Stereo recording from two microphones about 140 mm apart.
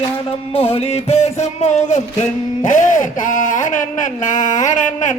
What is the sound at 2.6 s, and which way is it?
Speech, 65° left (ahead or behind).